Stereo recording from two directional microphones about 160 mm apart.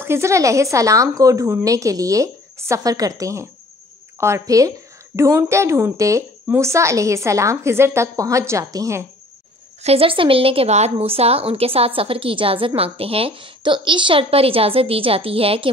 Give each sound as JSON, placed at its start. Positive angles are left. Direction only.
{"t": 0.0, "sound": "speech", "side_deg": -15}
{"t": 9.8, "sound": "a woman's voice", "side_deg": -35}